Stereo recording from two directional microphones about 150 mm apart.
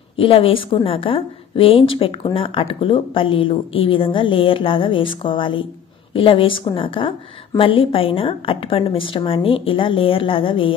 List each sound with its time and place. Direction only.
0.1 s a woman's voice: 40° left (ahead or behind)